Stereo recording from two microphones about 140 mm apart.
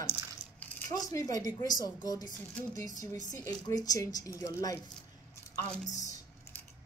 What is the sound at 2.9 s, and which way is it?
Speech, 65° right (ahead or behind).